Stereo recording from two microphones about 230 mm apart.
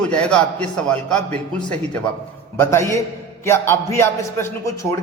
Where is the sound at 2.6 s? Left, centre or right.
Centre.